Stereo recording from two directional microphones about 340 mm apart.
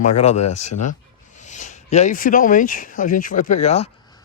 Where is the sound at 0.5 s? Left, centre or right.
Left.